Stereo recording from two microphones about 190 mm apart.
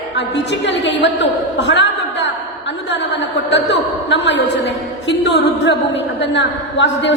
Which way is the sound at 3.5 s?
70° left (ahead or behind).